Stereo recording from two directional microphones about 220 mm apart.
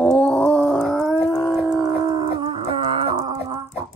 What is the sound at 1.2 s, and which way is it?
Dog, 10° left (ahead or behind).